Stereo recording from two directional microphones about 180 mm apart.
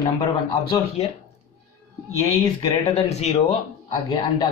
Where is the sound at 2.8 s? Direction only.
35° left (ahead or behind).